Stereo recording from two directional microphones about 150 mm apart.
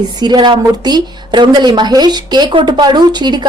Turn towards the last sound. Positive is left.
turn(degrees=-30)  # may be behind; listen again after turning